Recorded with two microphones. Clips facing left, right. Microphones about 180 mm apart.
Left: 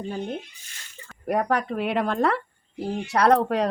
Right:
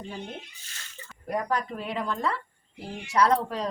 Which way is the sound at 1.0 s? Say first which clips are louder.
Left 6 dB; 65° left (ahead or behind).